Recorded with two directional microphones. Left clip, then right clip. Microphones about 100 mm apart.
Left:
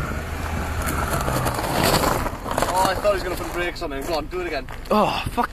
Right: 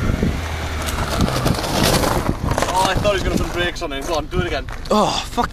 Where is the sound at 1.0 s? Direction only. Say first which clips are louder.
Right 4 dB; 50° right (ahead or behind).